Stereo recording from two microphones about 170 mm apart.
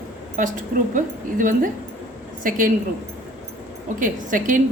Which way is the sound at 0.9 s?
50° right (ahead or behind).